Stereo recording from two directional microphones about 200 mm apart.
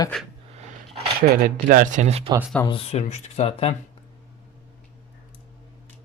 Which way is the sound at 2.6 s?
25° left (ahead or behind).